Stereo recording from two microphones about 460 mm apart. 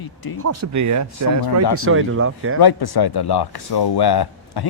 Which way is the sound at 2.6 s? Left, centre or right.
Left.